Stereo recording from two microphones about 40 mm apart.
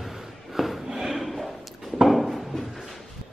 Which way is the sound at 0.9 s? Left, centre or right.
Centre.